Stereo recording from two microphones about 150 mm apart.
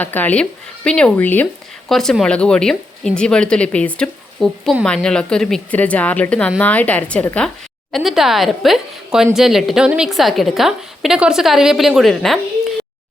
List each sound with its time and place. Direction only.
0.0 s a woman's voice: 10° left (ahead or behind)
7.9 s speech: centre (ahead or behind)